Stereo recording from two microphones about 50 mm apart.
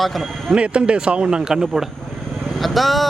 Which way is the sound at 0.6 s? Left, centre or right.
Right.